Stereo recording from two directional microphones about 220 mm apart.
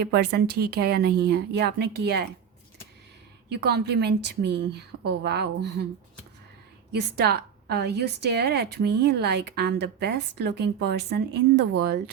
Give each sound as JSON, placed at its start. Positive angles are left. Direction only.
{"t": 0.0, "sound": "a woman's voice", "side_deg": -50}
{"t": 3.5, "sound": "a woman's voice", "side_deg": -50}
{"t": 6.9, "sound": "a woman's voice", "side_deg": -45}